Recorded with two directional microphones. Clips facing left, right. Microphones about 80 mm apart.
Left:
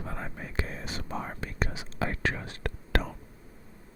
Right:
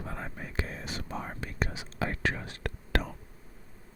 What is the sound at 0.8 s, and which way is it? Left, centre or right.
Whispering, left.